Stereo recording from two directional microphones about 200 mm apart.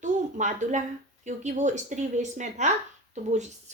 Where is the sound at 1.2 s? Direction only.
35° right (ahead or behind).